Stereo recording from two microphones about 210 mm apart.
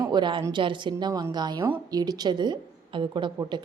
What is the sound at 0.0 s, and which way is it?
A woman's voice, 20° right (ahead or behind).